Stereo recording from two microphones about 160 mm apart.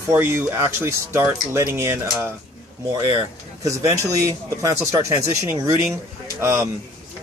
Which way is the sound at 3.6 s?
20° right (ahead or behind).